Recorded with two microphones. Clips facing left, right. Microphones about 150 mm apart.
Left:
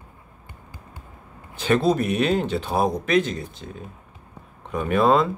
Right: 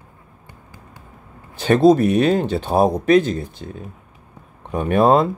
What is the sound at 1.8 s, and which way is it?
Speech, 35° right (ahead or behind).